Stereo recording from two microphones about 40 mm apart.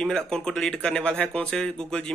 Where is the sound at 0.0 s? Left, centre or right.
Centre.